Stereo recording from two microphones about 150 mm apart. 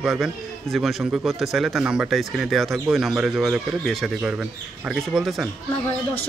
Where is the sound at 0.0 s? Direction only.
5° right (ahead or behind).